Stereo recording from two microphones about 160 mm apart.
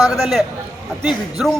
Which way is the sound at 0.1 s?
Centre (ahead or behind).